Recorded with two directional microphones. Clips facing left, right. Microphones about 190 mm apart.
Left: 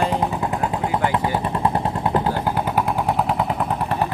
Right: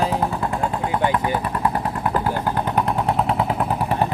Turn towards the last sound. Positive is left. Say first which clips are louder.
# right 1 dB
turn(degrees=-5)  # may be behind; listen again after turning